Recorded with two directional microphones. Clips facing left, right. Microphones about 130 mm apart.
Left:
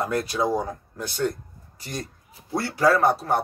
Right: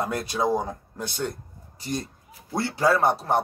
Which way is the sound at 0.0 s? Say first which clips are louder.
Left 2 dB; 20° right (ahead or behind).